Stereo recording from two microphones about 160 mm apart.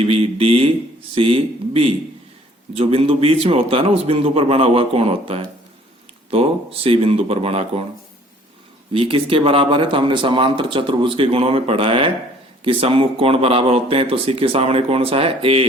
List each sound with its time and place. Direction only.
0.0 s speech: 35° right (ahead or behind)
8.9 s speech: 35° right (ahead or behind)